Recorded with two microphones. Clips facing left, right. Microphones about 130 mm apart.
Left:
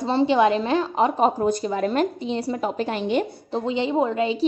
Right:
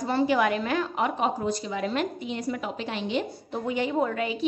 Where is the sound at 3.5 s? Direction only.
25° left (ahead or behind).